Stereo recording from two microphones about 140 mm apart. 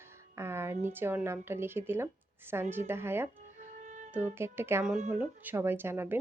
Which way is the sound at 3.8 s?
60° right (ahead or behind).